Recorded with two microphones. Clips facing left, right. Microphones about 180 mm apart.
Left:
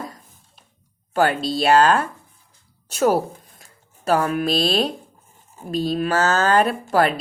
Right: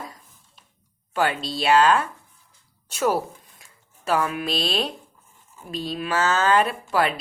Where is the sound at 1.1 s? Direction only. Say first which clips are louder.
Left 5 dB; 40° left (ahead or behind).